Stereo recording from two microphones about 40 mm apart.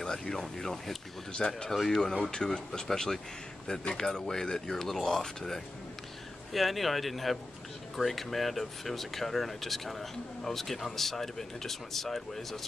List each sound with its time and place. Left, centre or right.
0.3 s speech: centre
6.5 s speech: centre